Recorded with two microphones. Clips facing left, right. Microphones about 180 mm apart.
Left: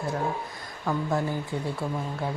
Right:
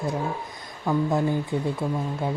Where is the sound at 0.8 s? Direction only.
15° right (ahead or behind).